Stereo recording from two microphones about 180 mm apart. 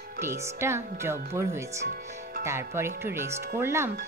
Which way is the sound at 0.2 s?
15° right (ahead or behind).